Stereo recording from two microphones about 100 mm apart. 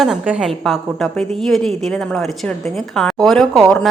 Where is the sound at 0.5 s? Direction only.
5° left (ahead or behind).